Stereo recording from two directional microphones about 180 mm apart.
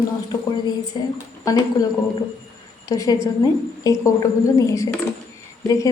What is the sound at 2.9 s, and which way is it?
A woman's voice, 20° left (ahead or behind).